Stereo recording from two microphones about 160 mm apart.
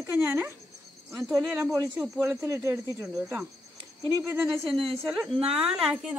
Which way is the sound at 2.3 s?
15° right (ahead or behind).